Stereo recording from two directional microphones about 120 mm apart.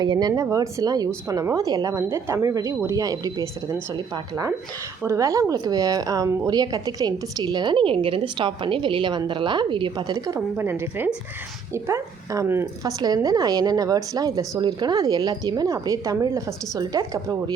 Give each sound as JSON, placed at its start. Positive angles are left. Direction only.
{"t": 0.0, "sound": "speech", "side_deg": -35}
{"t": 10.6, "sound": "speech", "side_deg": -20}